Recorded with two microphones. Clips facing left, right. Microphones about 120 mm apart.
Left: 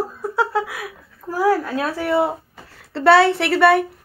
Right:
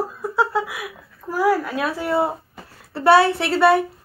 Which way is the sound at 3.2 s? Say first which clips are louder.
Left 2 dB; 70° left (ahead or behind).